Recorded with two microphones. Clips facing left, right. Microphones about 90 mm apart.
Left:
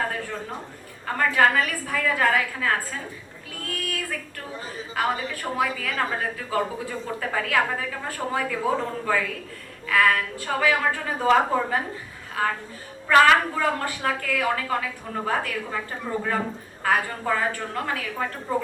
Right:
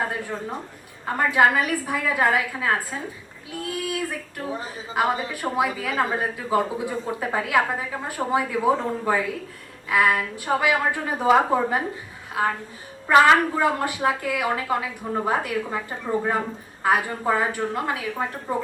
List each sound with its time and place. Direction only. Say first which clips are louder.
1.0 s speech: right 1 dB; 20° right (ahead or behind)
3.6 s a sound: right 4 dB; 15° right (ahead or behind)
4.9 s speech: right 3 dB; 20° right (ahead or behind)